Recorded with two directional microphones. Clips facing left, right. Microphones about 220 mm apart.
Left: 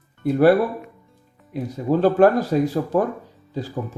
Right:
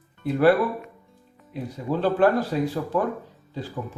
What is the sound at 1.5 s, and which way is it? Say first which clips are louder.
A man's voice: left 6 dB; 45° left (ahead or behind).